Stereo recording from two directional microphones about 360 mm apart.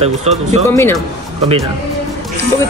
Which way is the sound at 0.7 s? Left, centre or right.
Centre.